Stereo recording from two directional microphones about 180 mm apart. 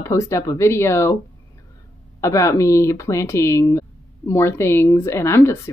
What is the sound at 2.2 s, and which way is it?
A woman's voice, 15° left (ahead or behind).